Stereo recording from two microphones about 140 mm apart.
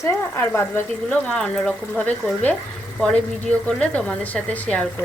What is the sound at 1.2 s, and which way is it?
Speech, 5° left (ahead or behind).